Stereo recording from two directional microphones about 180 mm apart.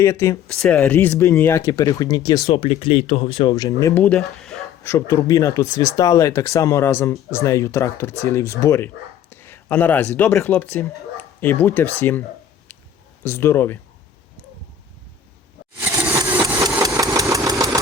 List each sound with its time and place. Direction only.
0.0 s speech: 15° left (ahead or behind)
0.4 s speech: 5° left (ahead or behind); by 2.5 s 20° left (ahead or behind)
2.5 s speech: 30° left (ahead or behind); by 4.0 s 15° left (ahead or behind)
4.0 s speech: 5° left (ahead or behind)
4.8 s speech: 15° left (ahead or behind)
13.2 s speech: 15° left (ahead or behind)
16.0 s a sound: 10° right (ahead or behind)
16.6 s engine: 20° right (ahead or behind)